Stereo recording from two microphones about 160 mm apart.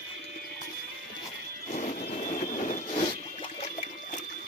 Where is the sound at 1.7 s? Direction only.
55° left (ahead or behind).